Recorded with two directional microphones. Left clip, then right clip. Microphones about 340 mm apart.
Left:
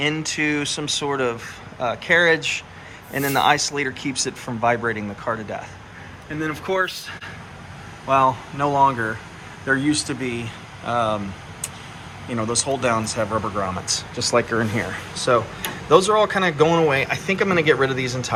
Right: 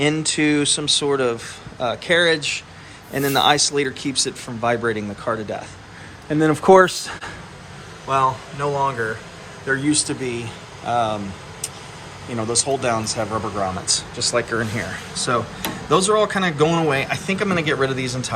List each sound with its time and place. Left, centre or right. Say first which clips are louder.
0.0 s speech: right 3 dB; centre
6.4 s speech: right 10 dB; right
8.0 s speech: left 1 dB; centre
10.8 s speech: right 1 dB; centre
12.4 s speech: right 1 dB; centre